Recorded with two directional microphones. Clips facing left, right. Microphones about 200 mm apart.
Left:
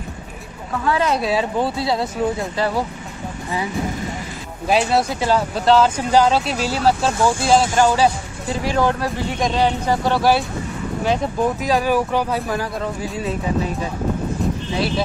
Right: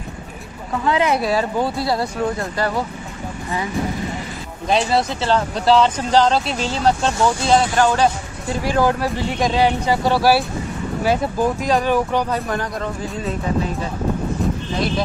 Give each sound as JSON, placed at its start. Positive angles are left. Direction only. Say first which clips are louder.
{"t": 0.8, "sound": "speech", "louder": "right 1 dB", "side_deg": -15}
{"t": 1.2, "sound": "speech", "louder": "even", "side_deg": 0}
{"t": 4.6, "sound": "speech", "louder": "left 1 dB", "side_deg": 5}